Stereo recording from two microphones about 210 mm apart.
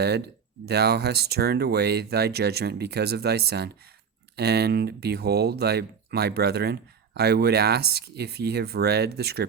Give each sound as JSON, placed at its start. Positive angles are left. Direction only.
{"t": 0.6, "sound": "speech", "side_deg": -50}